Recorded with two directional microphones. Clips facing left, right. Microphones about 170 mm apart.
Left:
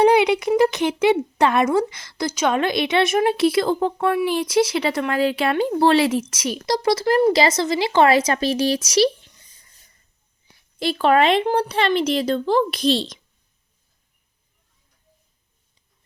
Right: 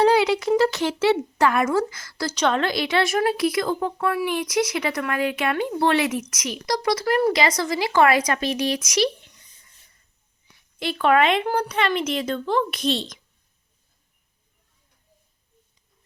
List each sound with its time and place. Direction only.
0.0 s speech: 20° left (ahead or behind)
10.8 s a woman's voice: 35° left (ahead or behind)